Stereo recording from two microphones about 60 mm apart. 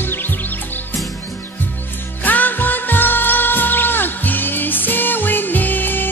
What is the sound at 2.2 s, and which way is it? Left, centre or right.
Music, left.